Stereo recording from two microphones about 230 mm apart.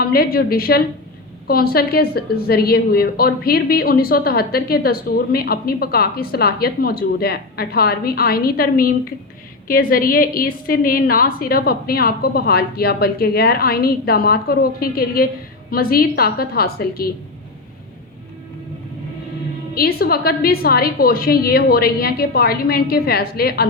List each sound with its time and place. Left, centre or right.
0.0 s a woman's voice: left
19.7 s a woman's voice: left